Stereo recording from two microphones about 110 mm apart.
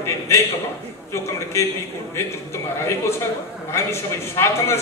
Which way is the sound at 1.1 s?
25° left (ahead or behind).